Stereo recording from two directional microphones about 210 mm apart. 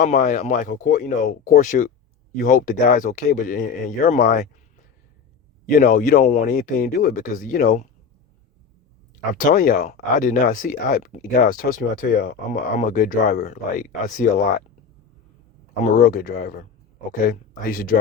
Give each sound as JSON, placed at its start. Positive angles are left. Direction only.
{"t": 0.0, "sound": "speech", "side_deg": 35}
{"t": 5.7, "sound": "speech", "side_deg": 40}
{"t": 9.4, "sound": "speech", "side_deg": 40}
{"t": 16.0, "sound": "speech", "side_deg": 45}